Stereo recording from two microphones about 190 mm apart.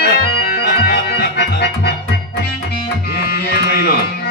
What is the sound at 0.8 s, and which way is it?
Organ, 60° left (ahead or behind).